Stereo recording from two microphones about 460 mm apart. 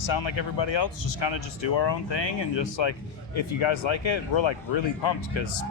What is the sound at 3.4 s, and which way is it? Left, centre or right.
Speech, left.